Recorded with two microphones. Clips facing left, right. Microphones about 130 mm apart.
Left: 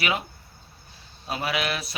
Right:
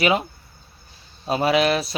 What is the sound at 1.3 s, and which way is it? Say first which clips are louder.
Speech: right 9 dB; 30° right (ahead or behind).